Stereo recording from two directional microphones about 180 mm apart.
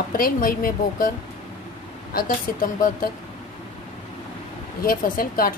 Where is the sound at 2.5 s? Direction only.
50° left (ahead or behind).